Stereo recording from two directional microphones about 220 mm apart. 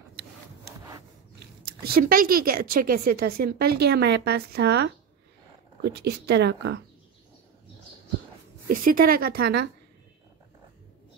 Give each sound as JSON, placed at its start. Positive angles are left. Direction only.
{"t": 1.9, "sound": "a woman's voice", "side_deg": -40}
{"t": 8.6, "sound": "a woman's voice", "side_deg": -40}